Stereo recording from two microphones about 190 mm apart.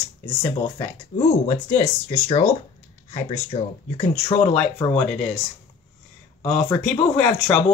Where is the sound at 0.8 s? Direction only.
20° left (ahead or behind).